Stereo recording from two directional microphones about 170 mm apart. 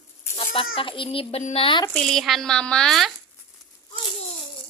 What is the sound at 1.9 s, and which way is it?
A woman's voice, 5° left (ahead or behind).